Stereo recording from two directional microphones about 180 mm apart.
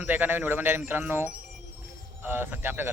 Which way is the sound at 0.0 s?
10° right (ahead or behind).